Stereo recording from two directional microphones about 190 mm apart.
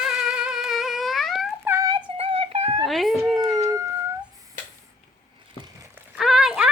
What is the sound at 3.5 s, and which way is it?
Howl, 15° right (ahead or behind).